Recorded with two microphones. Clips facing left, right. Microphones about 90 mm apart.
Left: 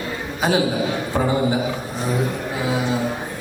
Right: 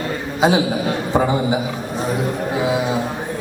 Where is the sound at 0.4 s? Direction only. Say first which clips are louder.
Right 3 dB; 20° right (ahead or behind).